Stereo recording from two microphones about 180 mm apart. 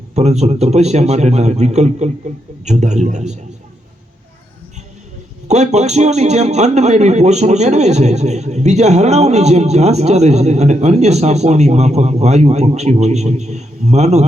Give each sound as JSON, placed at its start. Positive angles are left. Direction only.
{"t": 0.1, "sound": "a man's voice", "side_deg": -40}
{"t": 5.5, "sound": "a man's voice", "side_deg": -40}